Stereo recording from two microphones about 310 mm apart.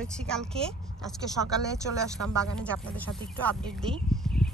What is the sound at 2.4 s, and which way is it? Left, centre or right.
Speech, centre.